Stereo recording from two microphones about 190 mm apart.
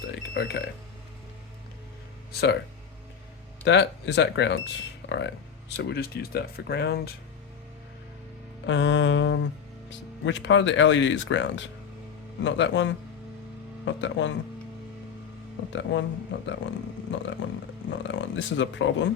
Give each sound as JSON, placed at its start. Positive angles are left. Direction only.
{"t": 0.2, "sound": "speech", "side_deg": 60}
{"t": 2.3, "sound": "speech", "side_deg": 60}
{"t": 3.6, "sound": "speech", "side_deg": 65}
{"t": 8.6, "sound": "speech", "side_deg": 70}
{"t": 15.7, "sound": "speech", "side_deg": 75}